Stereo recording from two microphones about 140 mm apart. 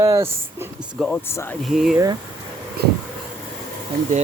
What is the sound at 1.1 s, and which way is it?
Speech, 15° left (ahead or behind).